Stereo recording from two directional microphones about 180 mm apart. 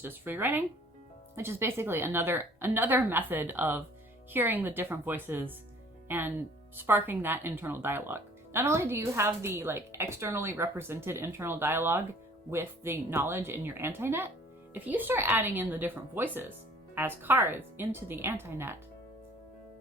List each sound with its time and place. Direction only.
0.0 s speech: 10° right (ahead or behind)